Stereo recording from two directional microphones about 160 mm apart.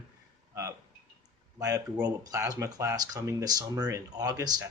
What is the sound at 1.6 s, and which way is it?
Speech, 20° right (ahead or behind).